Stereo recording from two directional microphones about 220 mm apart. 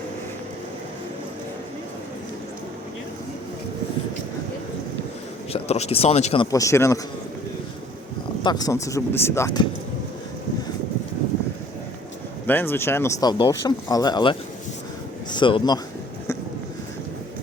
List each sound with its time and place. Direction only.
5.5 s speech: 30° left (ahead or behind); by 7.0 s 15° left (ahead or behind)
8.4 s speech: 15° left (ahead or behind)
12.5 s speech: 10° left (ahead or behind)